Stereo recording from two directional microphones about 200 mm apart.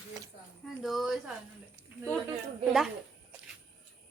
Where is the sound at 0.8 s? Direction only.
Centre (ahead or behind).